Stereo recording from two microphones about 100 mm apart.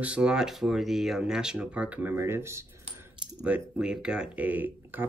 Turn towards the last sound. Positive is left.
turn(degrees=-20)  # may be behind; listen again after turning